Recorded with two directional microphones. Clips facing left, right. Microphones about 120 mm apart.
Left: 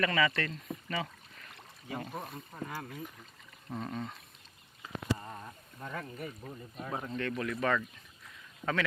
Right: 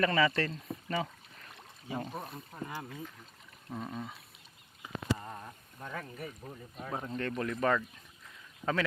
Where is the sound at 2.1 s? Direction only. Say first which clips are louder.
Even; centre (ahead or behind).